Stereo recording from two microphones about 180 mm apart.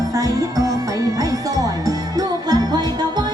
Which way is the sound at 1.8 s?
20° right (ahead or behind).